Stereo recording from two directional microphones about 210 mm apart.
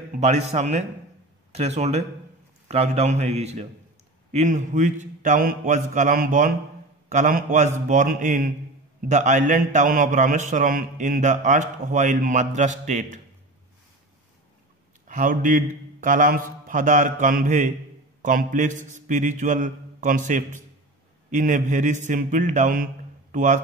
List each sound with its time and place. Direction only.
0.1 s a man's voice: 30° right (ahead or behind)
15.0 s a man's voice: 40° right (ahead or behind)